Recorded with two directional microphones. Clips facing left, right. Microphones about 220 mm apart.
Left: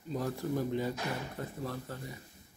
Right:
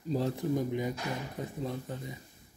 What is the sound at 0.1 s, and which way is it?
Speech, 25° right (ahead or behind).